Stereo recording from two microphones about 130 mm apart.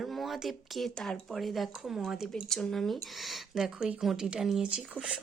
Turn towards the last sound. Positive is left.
turn(degrees=-5)  # may be behind; listen again after turning